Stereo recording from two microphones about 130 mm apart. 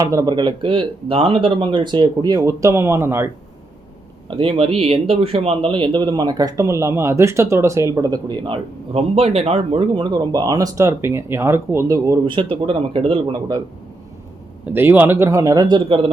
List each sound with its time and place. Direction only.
0.0 s speech: 25° right (ahead or behind)
4.3 s a man's voice: 45° right (ahead or behind); by 8.4 s 30° right (ahead or behind)
8.4 s a man's voice: 50° right (ahead or behind); by 12.2 s 25° right (ahead or behind)
12.2 s speech: 40° right (ahead or behind)
14.7 s a man's voice: 15° right (ahead or behind); by 16.0 s 35° right (ahead or behind)